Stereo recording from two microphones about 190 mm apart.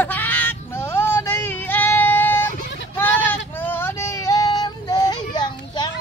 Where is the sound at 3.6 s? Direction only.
10° left (ahead or behind).